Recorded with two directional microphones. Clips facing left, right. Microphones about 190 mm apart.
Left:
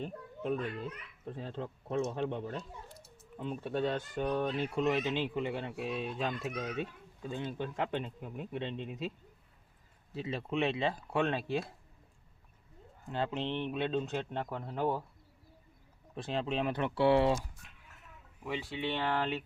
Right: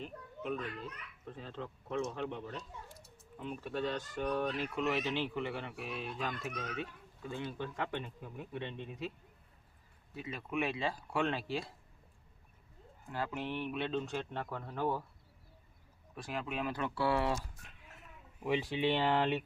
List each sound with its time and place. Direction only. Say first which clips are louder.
0.0 s a child's voice: left 4 dB; 35° left (ahead or behind)
4.9 s speech: left 1 dB; 15° left (ahead or behind)
6.5 s a child's voice: left 4 dB; 10° left (ahead or behind)
6.7 s speech: left 4 dB; 20° left (ahead or behind)
10.2 s speech: left 4 dB; 30° left (ahead or behind)
13.1 s speech: left 4 dB; 25° left (ahead or behind)
16.1 s speech: left 5 dB; 25° left (ahead or behind)
18.4 s speech: right 4 dB; 20° right (ahead or behind)